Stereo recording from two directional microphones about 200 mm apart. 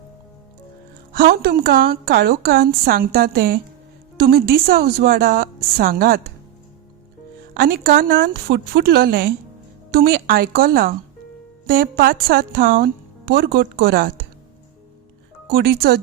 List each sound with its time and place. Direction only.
1.1 s a woman's voice: 45° right (ahead or behind)
7.5 s a woman's voice: 45° right (ahead or behind)
15.4 s a woman's voice: 50° right (ahead or behind)